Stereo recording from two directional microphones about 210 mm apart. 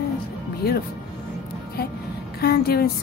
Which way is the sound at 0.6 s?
50° left (ahead or behind).